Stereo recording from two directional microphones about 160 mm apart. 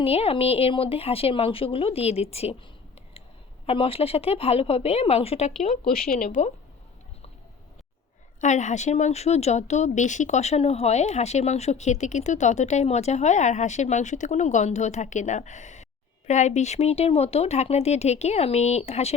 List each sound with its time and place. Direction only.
0.0 s speech: 40° left (ahead or behind)
3.7 s speech: 35° left (ahead or behind)
5.7 s speech: 65° left (ahead or behind)
8.4 s a woman's voice: 50° left (ahead or behind)